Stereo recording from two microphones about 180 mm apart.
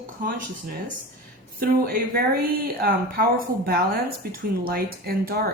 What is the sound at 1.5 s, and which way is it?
A woman's voice, 55° right (ahead or behind).